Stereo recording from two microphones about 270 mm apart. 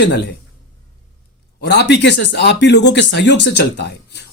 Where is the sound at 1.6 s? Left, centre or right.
Left.